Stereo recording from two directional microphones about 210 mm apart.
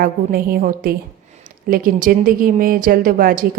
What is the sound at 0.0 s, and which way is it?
A woman's voice, 45° right (ahead or behind).